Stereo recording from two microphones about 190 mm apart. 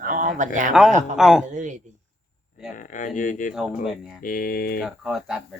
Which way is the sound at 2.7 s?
45° left (ahead or behind).